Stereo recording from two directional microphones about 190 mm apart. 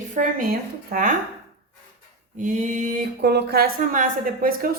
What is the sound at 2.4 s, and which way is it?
Speech, 40° right (ahead or behind).